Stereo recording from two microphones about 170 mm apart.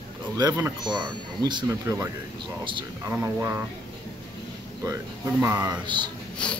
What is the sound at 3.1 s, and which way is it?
Speech, 15° right (ahead or behind).